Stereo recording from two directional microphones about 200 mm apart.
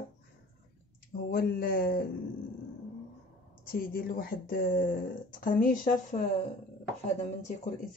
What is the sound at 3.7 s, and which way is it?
A woman's voice, 45° left (ahead or behind).